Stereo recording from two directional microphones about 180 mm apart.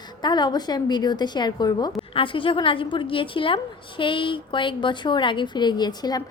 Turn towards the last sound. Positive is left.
turn(degrees=20)  # may be behind; listen again after turning